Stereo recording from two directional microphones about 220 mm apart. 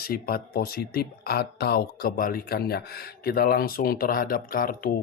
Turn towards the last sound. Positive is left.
turn(degrees=40)  # may be behind; listen again after turning